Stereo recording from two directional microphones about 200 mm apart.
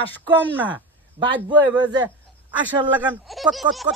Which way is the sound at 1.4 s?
20° right (ahead or behind).